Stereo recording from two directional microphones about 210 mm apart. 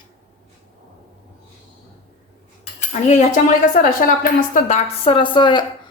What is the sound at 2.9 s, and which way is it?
A woman's voice, 35° left (ahead or behind).